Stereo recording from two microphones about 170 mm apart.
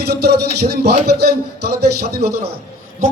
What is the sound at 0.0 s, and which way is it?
Speech, 70° right (ahead or behind).